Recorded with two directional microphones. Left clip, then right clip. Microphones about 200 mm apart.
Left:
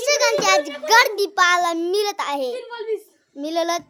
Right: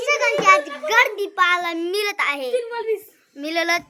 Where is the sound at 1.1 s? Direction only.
35° left (ahead or behind).